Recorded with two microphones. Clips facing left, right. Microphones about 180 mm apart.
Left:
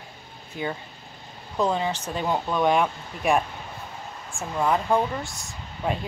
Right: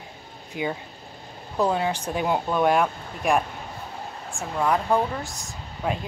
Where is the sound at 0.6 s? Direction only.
15° right (ahead or behind).